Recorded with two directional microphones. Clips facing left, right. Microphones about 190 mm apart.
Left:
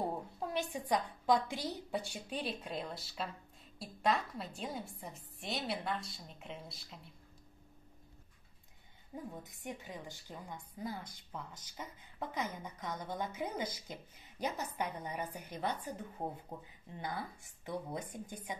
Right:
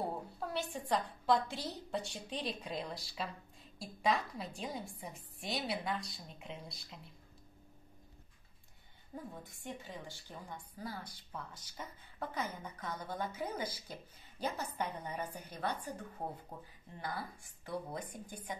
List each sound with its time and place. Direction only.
0.0 s a woman's voice: 15° left (ahead or behind); by 7.0 s centre (ahead or behind)
9.1 s a woman's voice: 15° left (ahead or behind)